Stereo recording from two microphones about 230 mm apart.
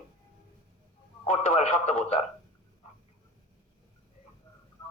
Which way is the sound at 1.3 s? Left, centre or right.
Left.